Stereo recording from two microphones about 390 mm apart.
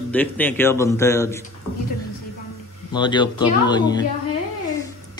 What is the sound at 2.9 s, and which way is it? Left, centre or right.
Speech, centre.